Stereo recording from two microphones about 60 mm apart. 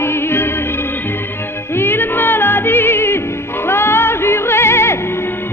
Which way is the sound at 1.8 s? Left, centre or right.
Left.